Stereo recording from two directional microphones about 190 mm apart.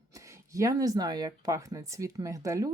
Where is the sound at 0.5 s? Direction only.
15° right (ahead or behind).